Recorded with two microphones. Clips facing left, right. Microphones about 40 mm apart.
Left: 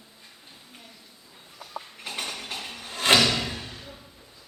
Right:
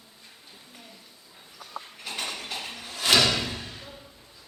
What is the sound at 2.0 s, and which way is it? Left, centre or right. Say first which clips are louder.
Dishes: even; left.